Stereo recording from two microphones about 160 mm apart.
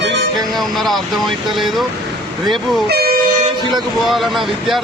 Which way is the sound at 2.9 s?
80° right.